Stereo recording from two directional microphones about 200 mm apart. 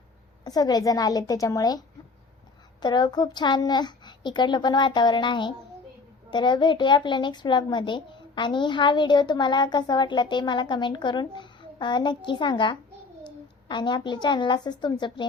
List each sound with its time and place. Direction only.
0.4 s a child's voice: 20° left (ahead or behind)
2.8 s a child's voice: 20° left (ahead or behind)